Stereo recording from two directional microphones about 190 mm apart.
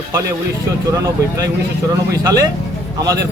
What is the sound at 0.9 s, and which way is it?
Speech, 20° right (ahead or behind).